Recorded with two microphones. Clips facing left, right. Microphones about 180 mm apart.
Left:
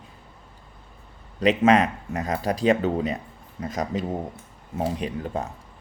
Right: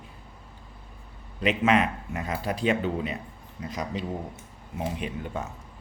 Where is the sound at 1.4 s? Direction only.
40° left (ahead or behind).